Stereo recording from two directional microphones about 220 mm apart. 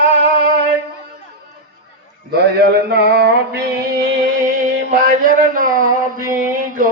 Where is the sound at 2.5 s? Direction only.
45° right (ahead or behind).